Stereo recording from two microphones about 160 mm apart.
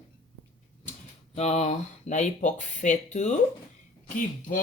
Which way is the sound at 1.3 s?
40° left (ahead or behind).